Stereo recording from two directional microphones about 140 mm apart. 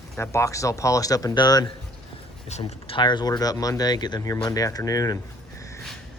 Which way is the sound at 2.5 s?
50° left (ahead or behind).